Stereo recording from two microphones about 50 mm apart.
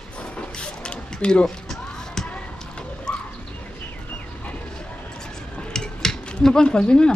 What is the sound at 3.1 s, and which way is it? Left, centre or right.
Bird, centre.